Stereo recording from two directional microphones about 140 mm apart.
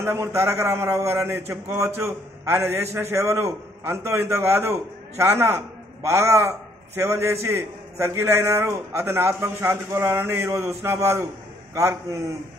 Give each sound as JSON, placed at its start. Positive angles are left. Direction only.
{"t": 0.0, "sound": "a man's voice", "side_deg": -20}